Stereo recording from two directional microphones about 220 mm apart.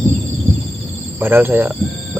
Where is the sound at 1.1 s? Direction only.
10° right (ahead or behind).